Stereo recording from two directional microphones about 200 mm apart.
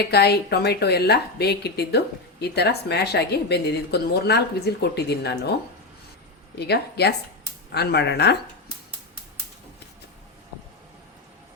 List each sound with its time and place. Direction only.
0.0 s speech: 55° left (ahead or behind)
6.6 s speech: 55° left (ahead or behind)